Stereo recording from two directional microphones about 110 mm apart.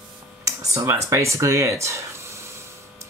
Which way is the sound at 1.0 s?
30° right (ahead or behind).